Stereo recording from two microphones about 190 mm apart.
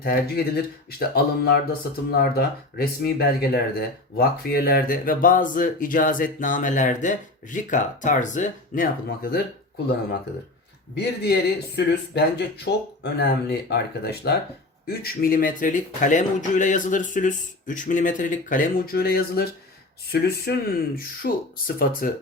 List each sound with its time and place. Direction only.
0.0 s speech: 55° left (ahead or behind)
10.9 s speech: 55° left (ahead or behind)